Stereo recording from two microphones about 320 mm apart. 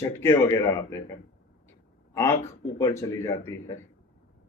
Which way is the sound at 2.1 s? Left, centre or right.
Centre.